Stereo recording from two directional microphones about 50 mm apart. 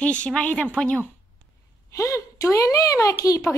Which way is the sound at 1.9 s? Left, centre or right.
Left.